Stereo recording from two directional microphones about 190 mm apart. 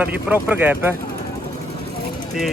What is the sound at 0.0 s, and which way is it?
Speech, 10° right (ahead or behind).